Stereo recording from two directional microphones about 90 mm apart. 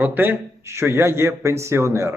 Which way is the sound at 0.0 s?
20° right (ahead or behind).